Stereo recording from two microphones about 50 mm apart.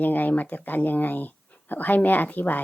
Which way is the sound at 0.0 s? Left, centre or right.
Left.